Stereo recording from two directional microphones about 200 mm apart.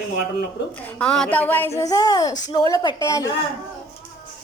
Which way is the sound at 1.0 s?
5° left (ahead or behind).